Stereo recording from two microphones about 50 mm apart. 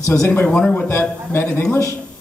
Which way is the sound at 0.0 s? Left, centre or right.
Left.